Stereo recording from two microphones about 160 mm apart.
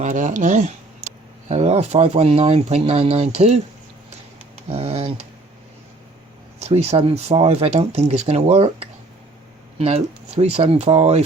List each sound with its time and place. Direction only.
0.0 s speech: 55° right (ahead or behind)
4.7 s speech: 40° right (ahead or behind)
6.6 s speech: 40° right (ahead or behind)